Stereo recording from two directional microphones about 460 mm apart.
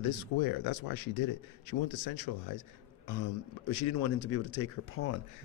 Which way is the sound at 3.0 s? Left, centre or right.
Left.